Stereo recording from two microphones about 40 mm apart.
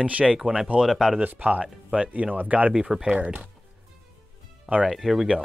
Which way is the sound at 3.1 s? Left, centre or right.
Right.